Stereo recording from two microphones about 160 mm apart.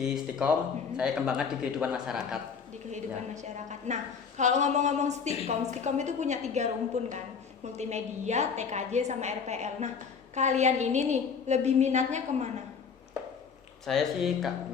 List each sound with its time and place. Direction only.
0.0 s a man's voice: 5° right (ahead or behind)
2.9 s a woman's voice: 45° right (ahead or behind)
13.8 s a man's voice: centre (ahead or behind)